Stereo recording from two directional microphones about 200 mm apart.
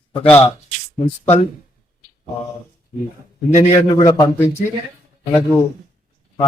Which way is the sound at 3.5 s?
35° left (ahead or behind).